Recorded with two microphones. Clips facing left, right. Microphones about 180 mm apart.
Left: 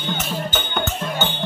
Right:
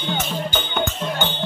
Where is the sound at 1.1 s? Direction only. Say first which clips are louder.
Even; 10° left (ahead or behind).